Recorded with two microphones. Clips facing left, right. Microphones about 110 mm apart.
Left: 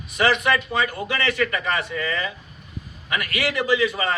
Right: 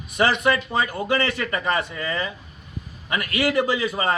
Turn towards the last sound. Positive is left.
turn(degrees=-30)  # may be behind; listen again after turning